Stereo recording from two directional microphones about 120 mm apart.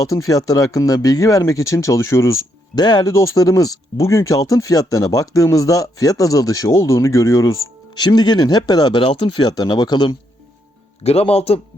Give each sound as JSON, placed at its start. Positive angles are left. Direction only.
{"t": 0.0, "sound": "speech", "side_deg": 30}
{"t": 11.0, "sound": "speech", "side_deg": 60}